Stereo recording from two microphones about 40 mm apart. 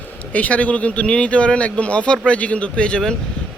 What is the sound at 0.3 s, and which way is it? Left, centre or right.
Speech, left.